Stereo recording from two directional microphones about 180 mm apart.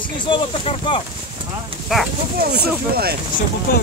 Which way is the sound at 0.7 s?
30° left (ahead or behind).